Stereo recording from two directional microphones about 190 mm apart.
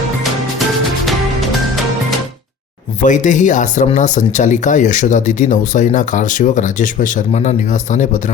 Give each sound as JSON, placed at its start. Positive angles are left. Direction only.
{"t": 3.0, "sound": "speech", "side_deg": 40}